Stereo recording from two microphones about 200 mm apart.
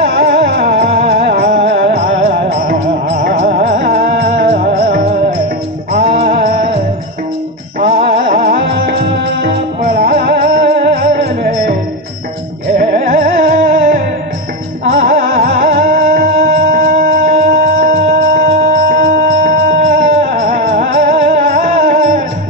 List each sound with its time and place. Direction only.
0.0 s music: 50° right (ahead or behind)
2.1 s music: 30° right (ahead or behind)
2.5 s music: 55° right (ahead or behind)
3.1 s music: 40° right (ahead or behind)
5.9 s music: 30° right (ahead or behind)
6.2 s music: 40° right (ahead or behind)
7.8 s music: 40° right (ahead or behind)
12.7 s music: 50° right (ahead or behind)
17.9 s music: 35° right (ahead or behind)